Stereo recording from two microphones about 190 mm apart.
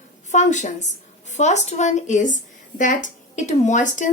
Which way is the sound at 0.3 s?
40° left (ahead or behind).